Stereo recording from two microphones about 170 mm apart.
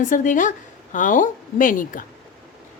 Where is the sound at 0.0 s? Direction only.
50° left (ahead or behind).